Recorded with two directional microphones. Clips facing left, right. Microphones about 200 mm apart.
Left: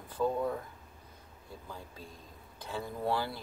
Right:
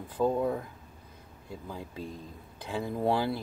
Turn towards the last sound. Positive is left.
turn(degrees=-15)  # may be behind; listen again after turning